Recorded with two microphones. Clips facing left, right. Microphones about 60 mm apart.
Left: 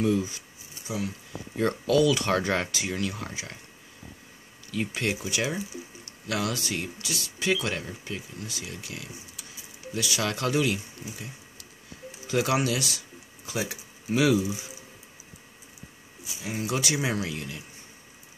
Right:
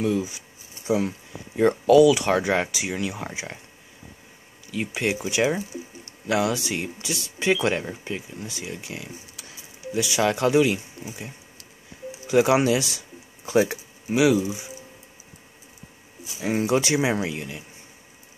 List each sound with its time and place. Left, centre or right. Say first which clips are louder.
0.0 s speech: right 1 dB; centre
0.8 s speech: right 9 dB; right
1.6 s speech: right 8 dB; centre
4.6 s speech: right 3 dB; centre
12.3 s speech: right 7 dB; right
14.0 s speech: right 3 dB; centre
16.3 s speech: right 9 dB; right
16.6 s speech: right 5 dB; right